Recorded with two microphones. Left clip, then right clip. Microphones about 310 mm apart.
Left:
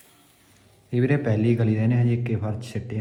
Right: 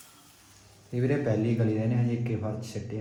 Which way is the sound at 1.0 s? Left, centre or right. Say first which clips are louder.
Left 4 dB; left.